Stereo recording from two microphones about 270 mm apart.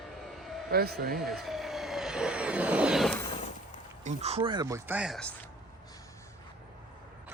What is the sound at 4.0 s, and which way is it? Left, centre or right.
Speech, right.